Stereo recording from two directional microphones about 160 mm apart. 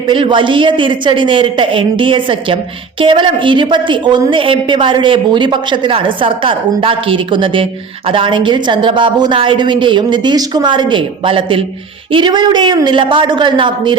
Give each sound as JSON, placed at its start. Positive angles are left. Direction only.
{"t": 0.1, "sound": "a woman's voice", "side_deg": -30}